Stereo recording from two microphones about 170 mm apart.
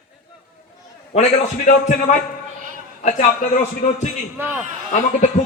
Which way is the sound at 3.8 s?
40° left (ahead or behind).